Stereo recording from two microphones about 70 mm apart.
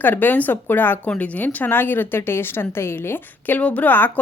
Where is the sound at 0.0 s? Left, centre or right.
Left.